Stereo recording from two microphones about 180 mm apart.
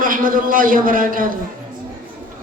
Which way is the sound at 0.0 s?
50° right (ahead or behind).